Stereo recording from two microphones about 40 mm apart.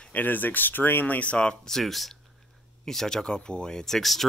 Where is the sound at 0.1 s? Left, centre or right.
Left.